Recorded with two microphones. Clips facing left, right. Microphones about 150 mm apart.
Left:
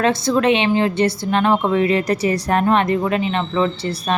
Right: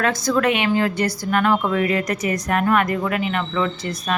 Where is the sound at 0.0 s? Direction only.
25° left (ahead or behind).